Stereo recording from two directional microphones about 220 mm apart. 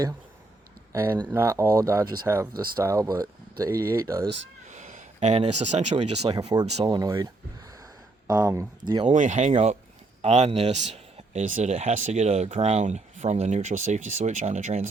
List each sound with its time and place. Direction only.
0.9 s speech: 10° right (ahead or behind)
4.6 s speech: 35° right (ahead or behind); by 7.3 s 20° right (ahead or behind)
8.3 s speech: 15° right (ahead or behind)
9.1 s speech: 35° right (ahead or behind)